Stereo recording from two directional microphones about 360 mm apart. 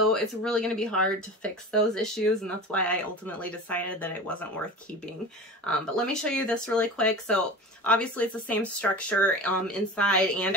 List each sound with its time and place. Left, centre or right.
0.1 s speech: centre
5.7 s speech: centre